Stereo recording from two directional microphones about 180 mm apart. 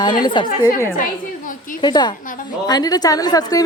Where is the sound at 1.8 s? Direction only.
25° left (ahead or behind).